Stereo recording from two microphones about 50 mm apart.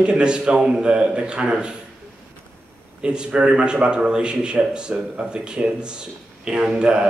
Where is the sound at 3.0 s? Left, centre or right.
Centre.